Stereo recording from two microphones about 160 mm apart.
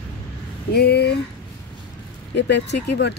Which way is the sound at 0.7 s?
85° left.